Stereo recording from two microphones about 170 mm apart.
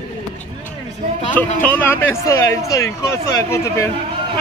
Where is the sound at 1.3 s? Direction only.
10° left (ahead or behind).